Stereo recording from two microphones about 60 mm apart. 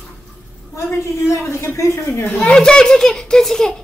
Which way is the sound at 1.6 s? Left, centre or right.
Left.